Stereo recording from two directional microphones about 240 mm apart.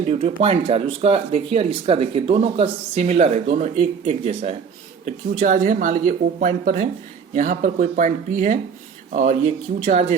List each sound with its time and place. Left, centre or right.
0.0 s speech: right
9.8 s speech: right